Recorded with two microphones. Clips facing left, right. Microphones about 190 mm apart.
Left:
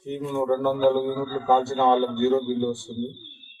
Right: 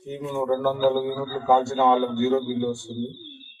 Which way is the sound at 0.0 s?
Centre (ahead or behind).